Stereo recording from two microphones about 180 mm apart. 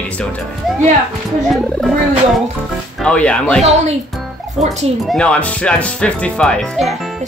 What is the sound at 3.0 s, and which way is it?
Speech, 5° left (ahead or behind).